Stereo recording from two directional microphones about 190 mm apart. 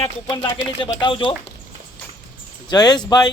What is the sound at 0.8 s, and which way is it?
Speech, 25° left (ahead or behind).